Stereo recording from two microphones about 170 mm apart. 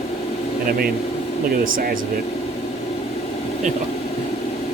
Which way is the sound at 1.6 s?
55° right (ahead or behind).